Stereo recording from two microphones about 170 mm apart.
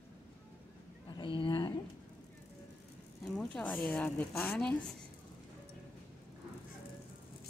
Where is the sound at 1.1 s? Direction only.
30° left (ahead or behind).